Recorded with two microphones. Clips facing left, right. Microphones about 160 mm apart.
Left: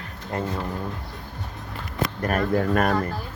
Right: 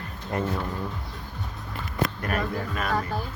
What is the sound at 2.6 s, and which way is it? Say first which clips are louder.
Speech: left 9 dB; 55° left (ahead or behind).